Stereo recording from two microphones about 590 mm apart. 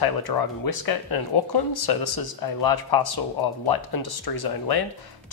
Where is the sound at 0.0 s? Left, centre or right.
Left.